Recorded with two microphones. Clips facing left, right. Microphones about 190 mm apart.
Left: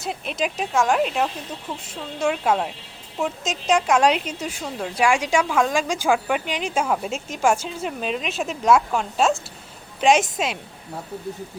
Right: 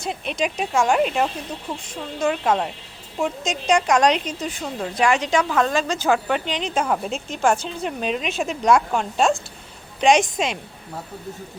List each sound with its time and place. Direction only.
0.0 s a woman's voice: centre (ahead or behind)